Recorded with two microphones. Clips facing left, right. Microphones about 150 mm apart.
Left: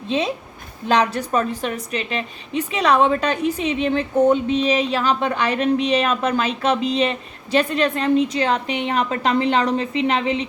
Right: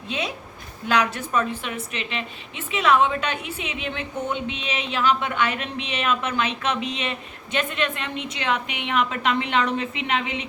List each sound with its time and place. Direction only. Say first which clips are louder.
0.9 s a woman's voice: left 4 dB; 35° left (ahead or behind)